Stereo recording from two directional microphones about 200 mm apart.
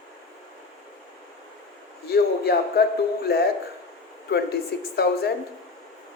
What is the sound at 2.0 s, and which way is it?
A man's voice, 50° left (ahead or behind).